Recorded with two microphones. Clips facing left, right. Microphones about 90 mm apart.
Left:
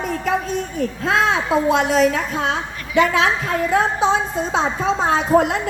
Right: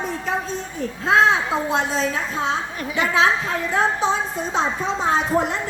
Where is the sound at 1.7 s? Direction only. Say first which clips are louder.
Left 7 dB; 75° left (ahead or behind).